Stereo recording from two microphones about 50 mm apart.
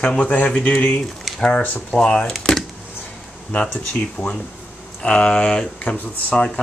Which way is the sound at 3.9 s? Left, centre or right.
Left.